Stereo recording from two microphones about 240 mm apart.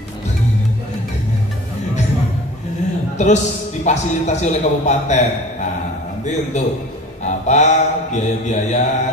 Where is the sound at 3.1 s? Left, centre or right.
Left.